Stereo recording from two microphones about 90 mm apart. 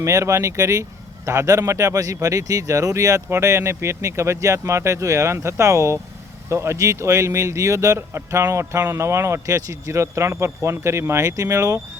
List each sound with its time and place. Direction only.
0.0 s speech: 35° right (ahead or behind)